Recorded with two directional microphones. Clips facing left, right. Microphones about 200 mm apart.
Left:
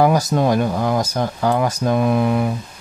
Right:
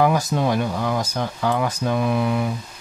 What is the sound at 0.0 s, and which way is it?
Speech, 40° left (ahead or behind).